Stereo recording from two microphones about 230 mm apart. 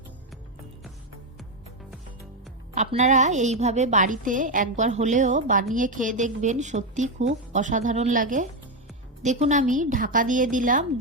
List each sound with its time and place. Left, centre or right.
2.7 s a woman's voice: right